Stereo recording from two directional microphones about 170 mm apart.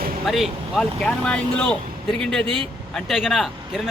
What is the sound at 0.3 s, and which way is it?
Speech, centre (ahead or behind).